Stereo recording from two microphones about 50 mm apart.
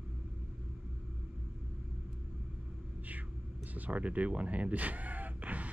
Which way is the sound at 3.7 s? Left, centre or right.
Right.